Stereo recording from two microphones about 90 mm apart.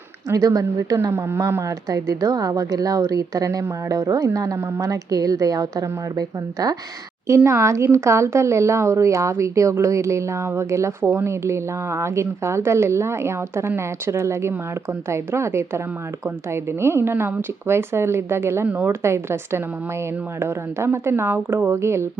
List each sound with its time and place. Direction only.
0.3 s a woman's voice: 40° right (ahead or behind)
1.1 s speech: 25° right (ahead or behind)
1.9 s a woman's voice: 40° right (ahead or behind)
7.3 s a woman's voice: 35° right (ahead or behind)